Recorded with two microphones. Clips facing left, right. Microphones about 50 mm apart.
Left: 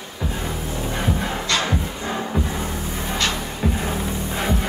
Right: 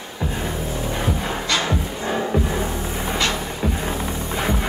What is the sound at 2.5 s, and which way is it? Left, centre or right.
Music, right.